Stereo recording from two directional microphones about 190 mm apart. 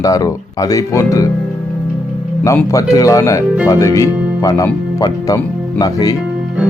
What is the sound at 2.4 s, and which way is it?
Speech, 15° left (ahead or behind).